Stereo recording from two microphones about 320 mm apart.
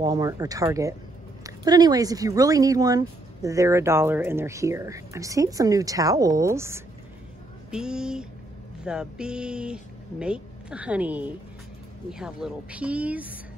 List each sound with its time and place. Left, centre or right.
0.0 s speech: centre